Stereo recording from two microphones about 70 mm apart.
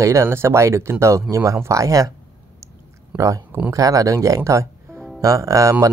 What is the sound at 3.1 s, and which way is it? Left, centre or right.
Speech, right.